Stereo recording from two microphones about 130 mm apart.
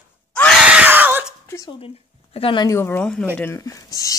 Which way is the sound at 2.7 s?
15° left (ahead or behind).